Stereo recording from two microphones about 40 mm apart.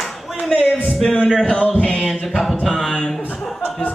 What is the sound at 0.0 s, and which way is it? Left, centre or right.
Clapping, centre.